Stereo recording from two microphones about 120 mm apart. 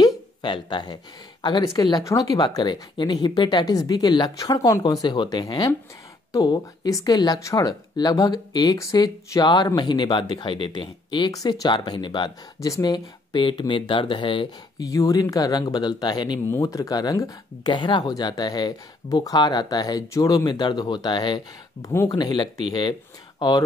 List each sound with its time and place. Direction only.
0.0 s a sound: 40° left (ahead or behind)
1.4 s speech: 40° left (ahead or behind)
5.4 s speech: 25° left (ahead or behind)
12.6 s speech: 30° left (ahead or behind); by 14.5 s 45° left (ahead or behind)
14.8 s speech: 30° left (ahead or behind)
16.4 s speech: 25° left (ahead or behind)